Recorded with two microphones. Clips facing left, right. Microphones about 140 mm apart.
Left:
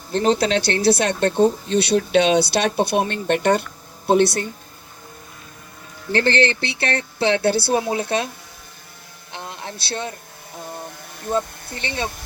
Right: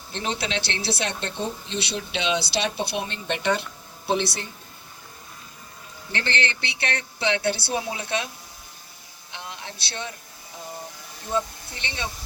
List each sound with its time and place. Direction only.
0.1 s speech: 40° left (ahead or behind)
6.1 s speech: 40° left (ahead or behind)
7.8 s speech: 50° left (ahead or behind)
8.0 s speech: 40° left (ahead or behind)
9.3 s a sound: 40° left (ahead or behind)
10.7 s a sound: 60° left (ahead or behind)